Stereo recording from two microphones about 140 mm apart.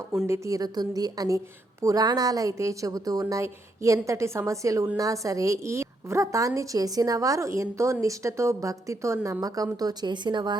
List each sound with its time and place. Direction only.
0.3 s a woman's voice: 25° right (ahead or behind)